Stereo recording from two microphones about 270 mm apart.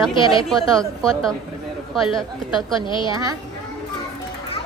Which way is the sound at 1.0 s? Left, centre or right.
Centre.